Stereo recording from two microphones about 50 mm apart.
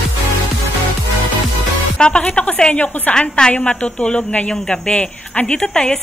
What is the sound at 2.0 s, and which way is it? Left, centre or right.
A woman's voice, centre.